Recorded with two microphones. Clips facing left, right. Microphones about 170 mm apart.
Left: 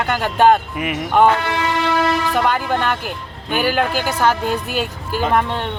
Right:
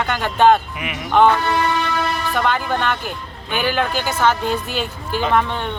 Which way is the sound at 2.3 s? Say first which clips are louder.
Left 2 dB; 10° left (ahead or behind).